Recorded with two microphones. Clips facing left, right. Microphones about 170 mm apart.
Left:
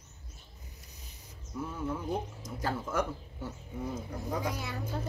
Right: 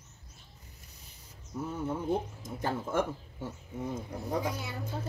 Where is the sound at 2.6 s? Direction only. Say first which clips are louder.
Right 2 dB; 25° right (ahead or behind).